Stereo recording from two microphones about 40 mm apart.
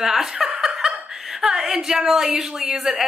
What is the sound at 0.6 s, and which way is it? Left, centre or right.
Laughter, centre.